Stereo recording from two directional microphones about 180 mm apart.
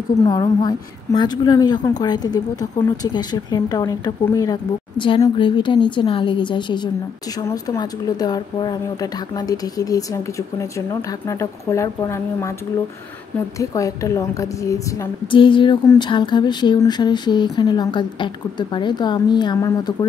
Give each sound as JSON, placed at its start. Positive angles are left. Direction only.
{"t": 0.3, "sound": "speech", "side_deg": 25}
{"t": 13.6, "sound": "a woman's voice", "side_deg": 20}